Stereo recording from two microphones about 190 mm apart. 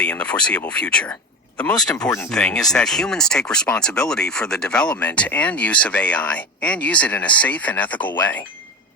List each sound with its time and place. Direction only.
0.0 s speech: 5° left (ahead or behind)
1.9 s speech: 15° left (ahead or behind)
2.3 s speech: 5° left (ahead or behind)